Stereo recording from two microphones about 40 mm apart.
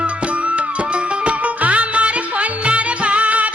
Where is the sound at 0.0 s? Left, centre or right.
Right.